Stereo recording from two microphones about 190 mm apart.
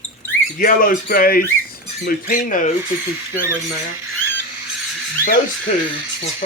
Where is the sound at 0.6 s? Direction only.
45° left (ahead or behind).